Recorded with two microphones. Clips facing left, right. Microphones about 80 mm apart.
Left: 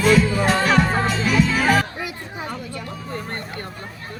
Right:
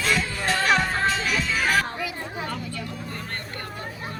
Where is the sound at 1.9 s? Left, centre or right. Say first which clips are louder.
Even; centre.